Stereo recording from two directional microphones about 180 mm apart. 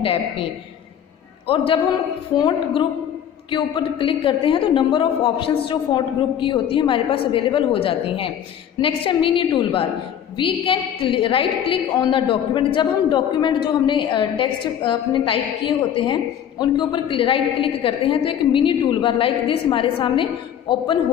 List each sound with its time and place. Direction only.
0.0 s a woman's voice: 30° left (ahead or behind)
1.5 s a woman's voice: 30° left (ahead or behind)